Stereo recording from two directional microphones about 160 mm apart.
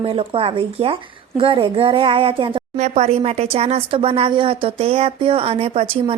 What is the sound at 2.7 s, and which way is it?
Speech, 45° right (ahead or behind).